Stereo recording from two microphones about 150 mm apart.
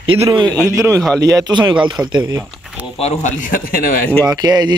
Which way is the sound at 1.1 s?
25° right (ahead or behind).